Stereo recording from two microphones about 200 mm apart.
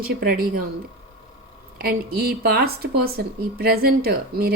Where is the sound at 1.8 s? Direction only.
50° right (ahead or behind).